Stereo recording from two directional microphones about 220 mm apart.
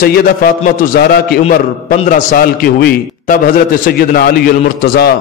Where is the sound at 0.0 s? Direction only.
40° left (ahead or behind).